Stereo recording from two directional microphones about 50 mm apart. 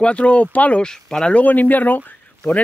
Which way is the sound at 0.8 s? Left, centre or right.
Centre.